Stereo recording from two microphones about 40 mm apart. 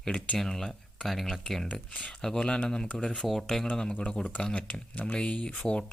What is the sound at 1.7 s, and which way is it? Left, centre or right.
Speech, left.